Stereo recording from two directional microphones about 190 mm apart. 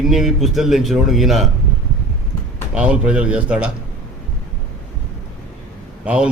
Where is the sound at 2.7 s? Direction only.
5° right (ahead or behind).